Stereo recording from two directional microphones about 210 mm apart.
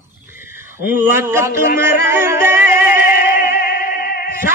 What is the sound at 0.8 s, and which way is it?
Speech, 10° right (ahead or behind).